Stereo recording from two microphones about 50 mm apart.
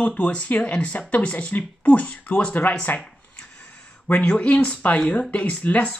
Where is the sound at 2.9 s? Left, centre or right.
Left.